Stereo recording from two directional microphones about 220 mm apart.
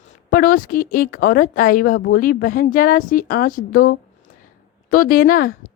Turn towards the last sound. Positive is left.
turn(degrees=40)  # may be behind; listen again after turning